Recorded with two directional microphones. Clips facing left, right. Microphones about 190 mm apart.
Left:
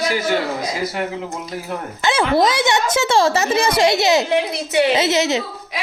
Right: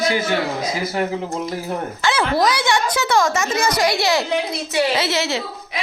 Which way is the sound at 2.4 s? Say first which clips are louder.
Left 2 dB; 25° left (ahead or behind).